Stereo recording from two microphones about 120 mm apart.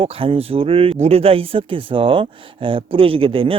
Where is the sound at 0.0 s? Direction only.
50° right (ahead or behind).